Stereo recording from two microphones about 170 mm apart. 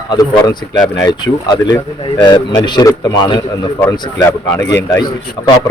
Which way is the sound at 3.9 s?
20° left (ahead or behind).